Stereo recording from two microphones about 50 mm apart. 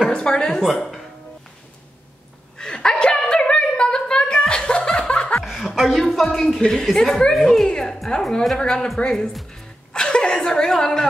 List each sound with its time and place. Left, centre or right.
0.1 s a woman's voice: centre
2.5 s a sound: centre
5.4 s chuckle: centre
5.8 s a sound: centre
6.6 s a woman's voice: centre
9.5 s music: centre